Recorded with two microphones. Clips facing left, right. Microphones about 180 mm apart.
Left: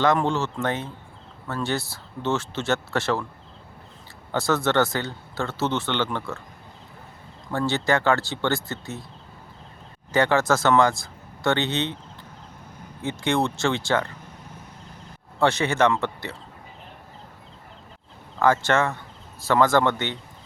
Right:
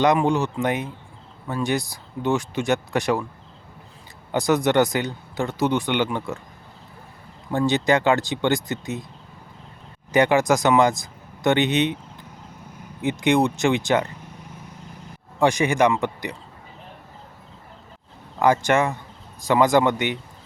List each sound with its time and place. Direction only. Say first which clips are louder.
0.0 s speech: right 3 dB; 15° right (ahead or behind)
4.3 s speech: right 3 dB; 15° right (ahead or behind)
7.5 s speech: right 3 dB; 15° right (ahead or behind)
10.1 s speech: right 3 dB; 15° right (ahead or behind)
13.0 s speech: right 5 dB; 15° right (ahead or behind)
15.4 s speech: right 2 dB; 15° right (ahead or behind)
18.3 s speech: right 2 dB; 15° right (ahead or behind)